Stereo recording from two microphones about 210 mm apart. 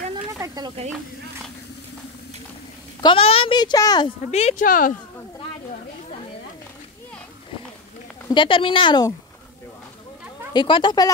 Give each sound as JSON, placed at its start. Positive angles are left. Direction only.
{"t": 0.1, "sound": "snake", "side_deg": -15}
{"t": 3.0, "sound": "a child's voice", "side_deg": 25}
{"t": 4.3, "sound": "speech", "side_deg": 30}
{"t": 8.3, "sound": "a child's voice", "side_deg": 25}
{"t": 10.5, "sound": "a child's voice", "side_deg": 20}